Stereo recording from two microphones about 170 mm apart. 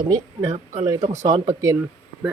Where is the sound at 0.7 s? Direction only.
35° right (ahead or behind).